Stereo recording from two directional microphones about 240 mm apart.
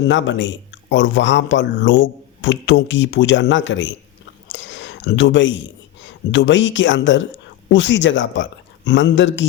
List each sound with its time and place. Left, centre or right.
0.1 s speech: left
4.4 s a sound: left
6.3 s speech: left